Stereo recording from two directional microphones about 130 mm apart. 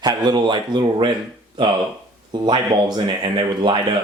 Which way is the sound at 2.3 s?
35° right (ahead or behind).